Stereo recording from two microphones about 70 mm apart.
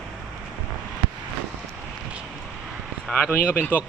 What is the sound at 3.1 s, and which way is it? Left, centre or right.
Speech, left.